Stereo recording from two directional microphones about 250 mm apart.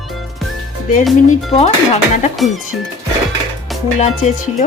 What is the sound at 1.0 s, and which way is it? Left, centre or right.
Speech, centre.